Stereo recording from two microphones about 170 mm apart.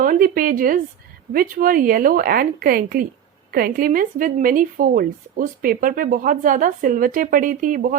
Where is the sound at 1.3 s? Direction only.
55° right (ahead or behind).